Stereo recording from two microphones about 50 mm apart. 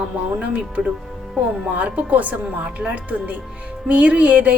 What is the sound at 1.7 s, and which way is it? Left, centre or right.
A woman's voice, right.